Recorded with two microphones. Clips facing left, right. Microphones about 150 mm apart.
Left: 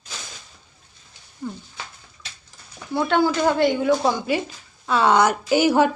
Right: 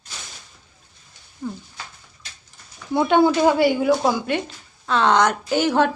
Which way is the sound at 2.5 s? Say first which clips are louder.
Left 1 dB; 90° left.